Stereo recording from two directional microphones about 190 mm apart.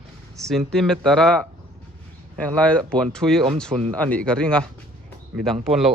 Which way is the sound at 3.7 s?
35° right (ahead or behind).